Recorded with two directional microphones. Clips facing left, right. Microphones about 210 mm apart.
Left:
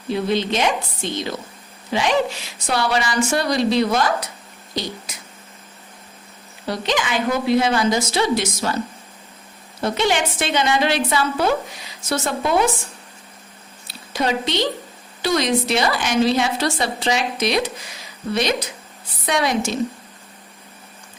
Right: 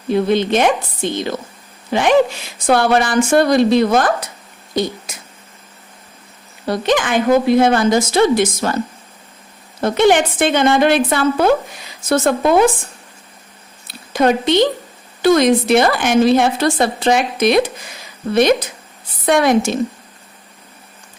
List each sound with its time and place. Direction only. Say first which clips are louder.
0.1 s a woman's voice: right 6 dB; 55° right (ahead or behind)
6.7 s a woman's voice: right 6 dB; 50° right (ahead or behind)
9.8 s a woman's voice: right 7 dB; 55° right (ahead or behind)
13.8 s a sound: right 8 dB; 50° right (ahead or behind)
15.2 s a woman's voice: right 8 dB; 50° right (ahead or behind)
19.2 s a woman's voice: right 7 dB; 55° right (ahead or behind)